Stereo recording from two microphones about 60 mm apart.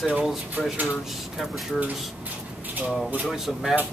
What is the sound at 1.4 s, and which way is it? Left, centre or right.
Speech, centre.